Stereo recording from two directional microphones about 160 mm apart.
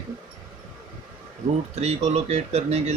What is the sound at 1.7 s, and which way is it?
Speech, 40° right (ahead or behind).